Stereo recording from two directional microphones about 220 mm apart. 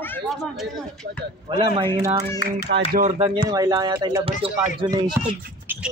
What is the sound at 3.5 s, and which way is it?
Speech, 15° right (ahead or behind).